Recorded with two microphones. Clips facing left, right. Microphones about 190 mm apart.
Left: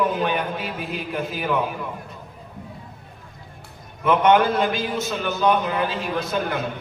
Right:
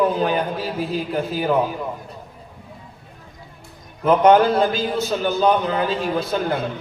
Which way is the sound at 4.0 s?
30° right (ahead or behind).